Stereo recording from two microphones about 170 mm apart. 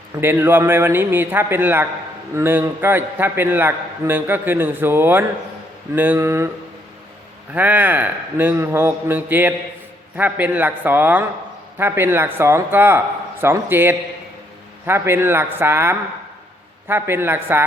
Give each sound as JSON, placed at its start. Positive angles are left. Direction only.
{"t": 0.2, "sound": "a man's voice", "side_deg": -15}
{"t": 7.5, "sound": "a man's voice", "side_deg": -10}